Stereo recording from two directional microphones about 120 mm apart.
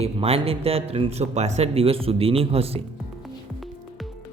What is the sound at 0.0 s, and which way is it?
Speech, 55° right (ahead or behind).